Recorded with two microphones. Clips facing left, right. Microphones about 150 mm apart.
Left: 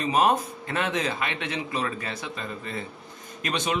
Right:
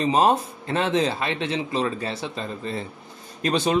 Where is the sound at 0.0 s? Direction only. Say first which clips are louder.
Right 3 dB; 30° right (ahead or behind).